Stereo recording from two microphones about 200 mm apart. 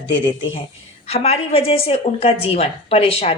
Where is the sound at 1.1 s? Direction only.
30° left (ahead or behind).